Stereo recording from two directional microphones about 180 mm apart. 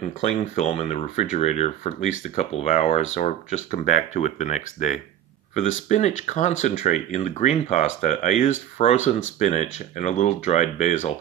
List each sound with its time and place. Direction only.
0.2 s speech: 40° left (ahead or behind)